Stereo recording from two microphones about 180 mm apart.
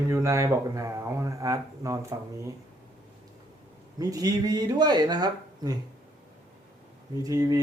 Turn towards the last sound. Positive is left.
turn(degrees=-20)  # may be behind; listen again after turning